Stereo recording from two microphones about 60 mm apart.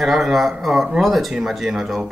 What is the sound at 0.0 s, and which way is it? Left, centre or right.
Speech, centre.